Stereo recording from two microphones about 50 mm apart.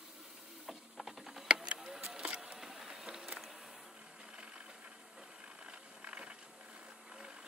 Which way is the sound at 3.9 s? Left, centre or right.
Centre.